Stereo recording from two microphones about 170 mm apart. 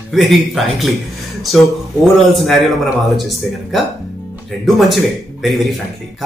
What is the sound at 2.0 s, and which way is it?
Speech, centre (ahead or behind).